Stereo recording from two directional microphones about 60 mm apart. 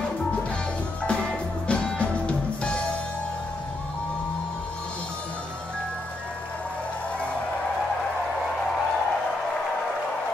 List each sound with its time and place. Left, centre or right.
1.7 s music: centre